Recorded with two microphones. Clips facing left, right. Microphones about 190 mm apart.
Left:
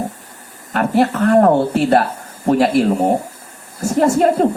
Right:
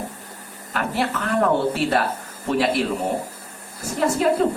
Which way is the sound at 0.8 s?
40° left (ahead or behind).